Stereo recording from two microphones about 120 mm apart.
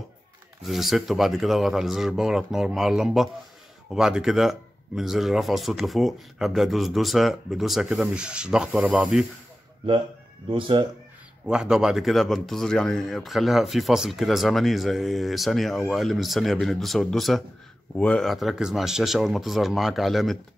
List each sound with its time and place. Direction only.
0.7 s speech: centre (ahead or behind)
10.5 s speech: 45° right (ahead or behind)
11.4 s speech: 5° right (ahead or behind)